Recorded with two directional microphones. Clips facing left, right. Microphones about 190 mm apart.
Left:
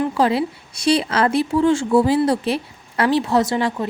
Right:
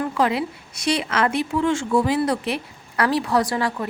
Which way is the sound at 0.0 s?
30° left (ahead or behind).